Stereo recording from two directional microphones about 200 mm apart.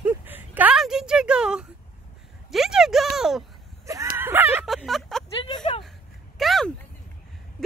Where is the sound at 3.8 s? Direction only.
15° right (ahead or behind).